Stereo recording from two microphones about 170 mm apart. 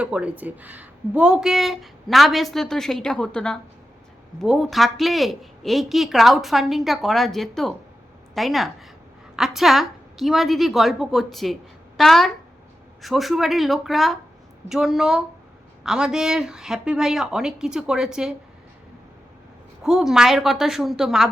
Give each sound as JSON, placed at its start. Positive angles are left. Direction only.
{"t": 0.0, "sound": "speech", "side_deg": -5}
{"t": 19.8, "sound": "speech", "side_deg": -5}